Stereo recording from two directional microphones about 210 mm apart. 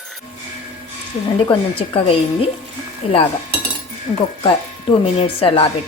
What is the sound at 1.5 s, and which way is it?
Speech, 25° left (ahead or behind).